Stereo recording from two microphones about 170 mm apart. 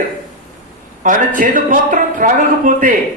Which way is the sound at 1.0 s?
50° right (ahead or behind).